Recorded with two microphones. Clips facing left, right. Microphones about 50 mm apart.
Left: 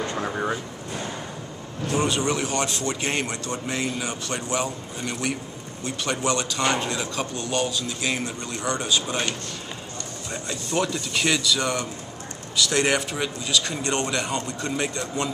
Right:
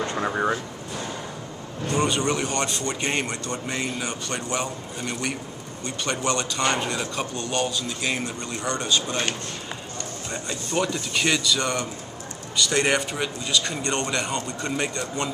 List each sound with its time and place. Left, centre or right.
0.2 s a sound: centre
1.9 s speech: centre
10.3 s speech: centre